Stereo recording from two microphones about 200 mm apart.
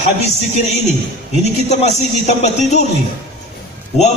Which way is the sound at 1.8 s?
35° left (ahead or behind).